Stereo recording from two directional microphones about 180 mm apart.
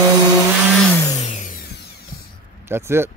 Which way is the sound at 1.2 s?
40° left (ahead or behind).